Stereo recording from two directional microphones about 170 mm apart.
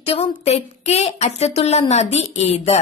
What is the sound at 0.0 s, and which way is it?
A woman's voice, 35° left (ahead or behind).